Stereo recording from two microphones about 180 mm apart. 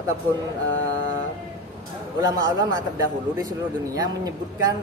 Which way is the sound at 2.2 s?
20° right (ahead or behind).